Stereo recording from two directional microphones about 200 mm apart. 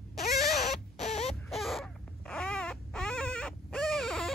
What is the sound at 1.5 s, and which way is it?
Baby cry, centre (ahead or behind).